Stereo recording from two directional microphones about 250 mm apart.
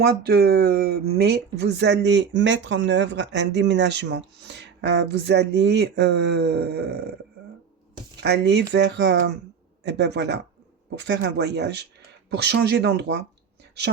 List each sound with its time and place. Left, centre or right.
0.0 s speech: right
8.2 s speech: right